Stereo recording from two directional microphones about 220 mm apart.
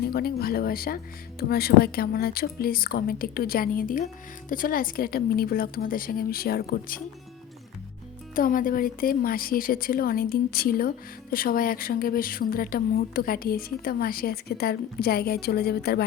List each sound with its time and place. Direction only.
0.0 s a woman's voice: 45° left (ahead or behind)
8.4 s a woman's voice: 40° left (ahead or behind)